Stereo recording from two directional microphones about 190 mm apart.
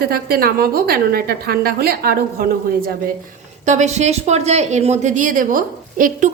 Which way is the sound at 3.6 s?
40° right (ahead or behind).